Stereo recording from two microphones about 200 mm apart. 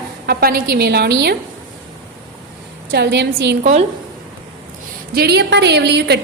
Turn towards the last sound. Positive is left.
turn(degrees=-55)  # may be behind; listen again after turning